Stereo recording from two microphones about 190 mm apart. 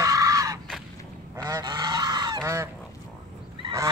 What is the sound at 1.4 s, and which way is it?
Goose, 20° right (ahead or behind).